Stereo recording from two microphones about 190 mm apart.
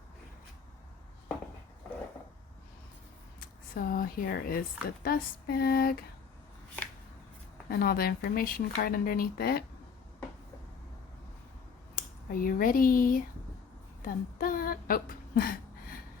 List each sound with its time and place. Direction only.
3.4 s speech: 50° left (ahead or behind)
7.7 s speech: 55° left (ahead or behind)
11.9 s speech: 50° left (ahead or behind)